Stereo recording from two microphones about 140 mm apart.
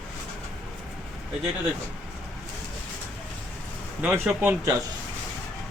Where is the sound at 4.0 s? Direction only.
10° right (ahead or behind).